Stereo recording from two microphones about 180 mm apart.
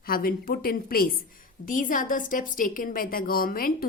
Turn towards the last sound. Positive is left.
turn(degrees=55)  # may be behind; listen again after turning